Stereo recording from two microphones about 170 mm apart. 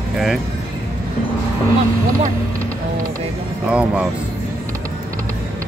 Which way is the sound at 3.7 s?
5° right (ahead or behind).